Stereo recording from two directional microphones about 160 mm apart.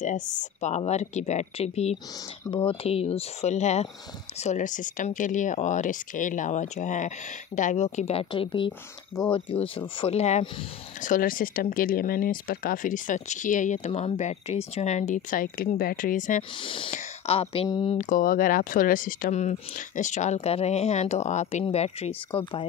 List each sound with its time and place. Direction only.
0.0 s speech: 50° left (ahead or behind); by 8.7 s 30° left (ahead or behind)
9.8 s speech: 35° left (ahead or behind)
11.0 s speech: 55° left (ahead or behind)
16.6 s speech: 35° left (ahead or behind)
17.9 s speech: 55° left (ahead or behind); by 22.7 s 30° left (ahead or behind)